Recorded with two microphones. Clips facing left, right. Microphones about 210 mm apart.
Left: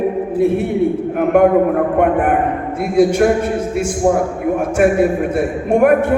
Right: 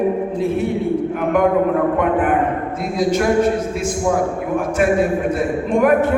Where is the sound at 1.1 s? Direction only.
50° left (ahead or behind).